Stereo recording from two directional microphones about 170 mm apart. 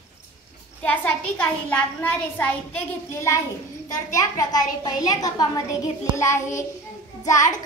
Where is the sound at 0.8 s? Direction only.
10° left (ahead or behind).